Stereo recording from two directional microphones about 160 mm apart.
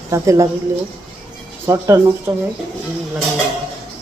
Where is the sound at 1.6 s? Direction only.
20° right (ahead or behind).